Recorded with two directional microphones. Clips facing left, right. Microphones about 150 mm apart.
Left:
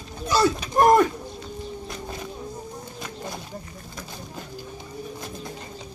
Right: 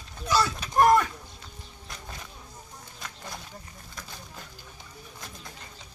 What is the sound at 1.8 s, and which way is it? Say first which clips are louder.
Music: left 9 dB; 25° left (ahead or behind).